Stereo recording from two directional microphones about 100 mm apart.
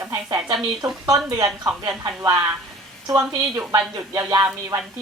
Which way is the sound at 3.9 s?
30° right (ahead or behind).